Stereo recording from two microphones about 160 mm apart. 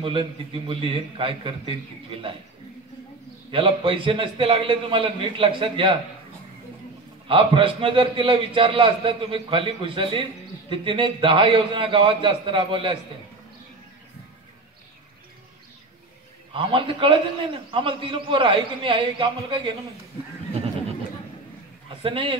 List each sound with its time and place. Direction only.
0.0 s a man's voice: 35° right (ahead or behind)
3.5 s a man's voice: 35° right (ahead or behind)
7.2 s a man's voice: 35° right (ahead or behind)
16.5 s a man's voice: 35° right (ahead or behind)
22.0 s a man's voice: 35° right (ahead or behind)